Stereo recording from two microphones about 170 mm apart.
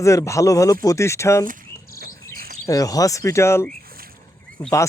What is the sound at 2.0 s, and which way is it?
Cricket, 60° right (ahead or behind).